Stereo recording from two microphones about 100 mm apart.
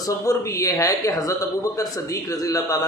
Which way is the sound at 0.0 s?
35° left (ahead or behind).